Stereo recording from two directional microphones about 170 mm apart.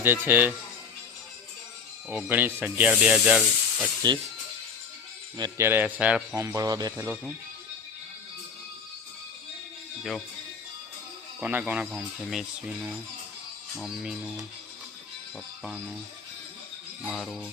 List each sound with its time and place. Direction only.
0.0 s speech: 10° right (ahead or behind)
2.0 s speech: 10° right (ahead or behind)
5.4 s speech: 15° right (ahead or behind)
6.4 s speech: 20° right (ahead or behind)
10.0 s speech: centre (ahead or behind)
11.3 s speech: 10° right (ahead or behind)
15.6 s speech: 5° right (ahead or behind)
17.1 s speech: centre (ahead or behind)